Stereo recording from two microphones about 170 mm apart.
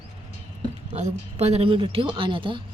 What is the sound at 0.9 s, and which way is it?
Speech, 40° right (ahead or behind).